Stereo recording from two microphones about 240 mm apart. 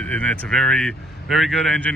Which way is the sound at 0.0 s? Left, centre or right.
Centre.